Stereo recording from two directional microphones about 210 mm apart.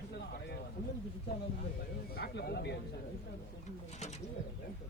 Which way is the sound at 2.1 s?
45° left (ahead or behind).